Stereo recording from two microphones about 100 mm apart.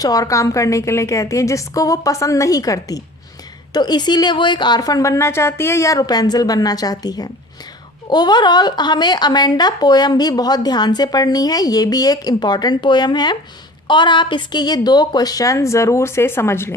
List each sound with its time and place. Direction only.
0.0 s a woman's voice: 35° left (ahead or behind)